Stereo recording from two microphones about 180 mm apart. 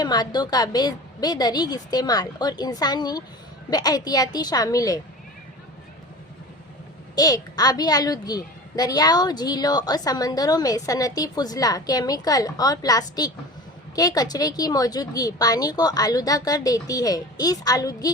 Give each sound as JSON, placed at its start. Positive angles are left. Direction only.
{"t": 0.0, "sound": "a child's voice", "side_deg": 25}
{"t": 7.2, "sound": "a child's voice", "side_deg": 20}